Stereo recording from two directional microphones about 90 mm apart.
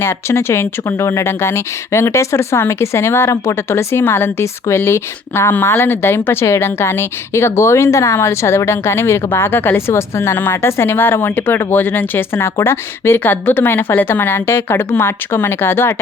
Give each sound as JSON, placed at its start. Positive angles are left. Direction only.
{"t": 0.0, "sound": "speech", "side_deg": 30}